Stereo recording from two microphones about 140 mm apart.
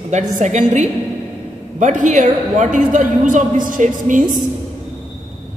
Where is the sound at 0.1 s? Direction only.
55° right (ahead or behind).